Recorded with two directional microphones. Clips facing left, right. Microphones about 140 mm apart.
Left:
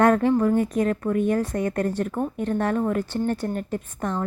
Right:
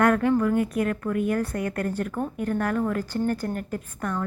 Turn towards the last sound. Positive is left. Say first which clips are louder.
# left 2 dB
turn(degrees=25)  # may be behind; listen again after turning